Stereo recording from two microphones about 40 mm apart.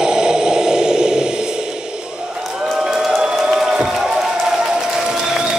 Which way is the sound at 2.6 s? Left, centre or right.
Centre.